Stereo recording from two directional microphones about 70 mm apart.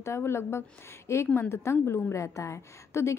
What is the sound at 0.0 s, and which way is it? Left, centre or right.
A woman's voice, left.